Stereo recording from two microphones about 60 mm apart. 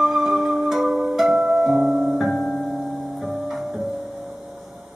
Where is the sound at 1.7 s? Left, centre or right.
Right.